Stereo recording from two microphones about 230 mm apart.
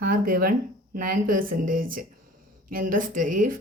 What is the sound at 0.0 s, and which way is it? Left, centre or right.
Speech, right.